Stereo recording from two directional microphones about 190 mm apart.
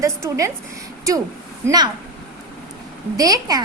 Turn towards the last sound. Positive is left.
turn(degrees=-20)  # may be behind; listen again after turning